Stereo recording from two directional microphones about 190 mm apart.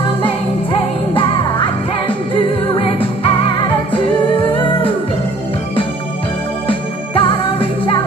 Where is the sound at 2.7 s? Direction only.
30° left (ahead or behind).